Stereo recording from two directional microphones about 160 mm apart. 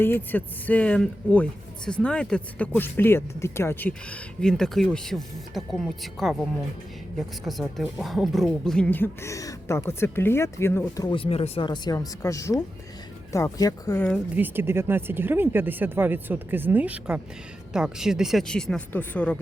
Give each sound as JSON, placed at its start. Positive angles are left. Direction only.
{"t": 0.0, "sound": "speech", "side_deg": 10}
{"t": 11.1, "sound": "speech", "side_deg": 35}
{"t": 14.3, "sound": "speech", "side_deg": -10}